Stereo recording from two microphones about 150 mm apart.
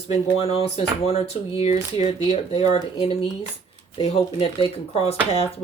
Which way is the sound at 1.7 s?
25° right (ahead or behind).